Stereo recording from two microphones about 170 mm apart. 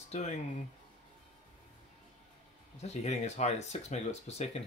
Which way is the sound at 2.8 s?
40° left (ahead or behind).